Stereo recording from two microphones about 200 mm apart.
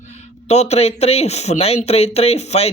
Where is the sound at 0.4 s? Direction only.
35° left (ahead or behind).